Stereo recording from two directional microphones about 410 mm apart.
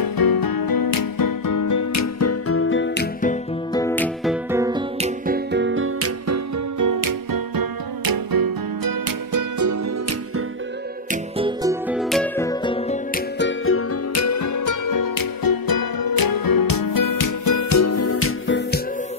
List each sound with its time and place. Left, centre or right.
0.0 s music: left; by 3.8 s centre
3.8 s music: centre; by 9.8 s right
11.3 s music: centre
13.1 s music: left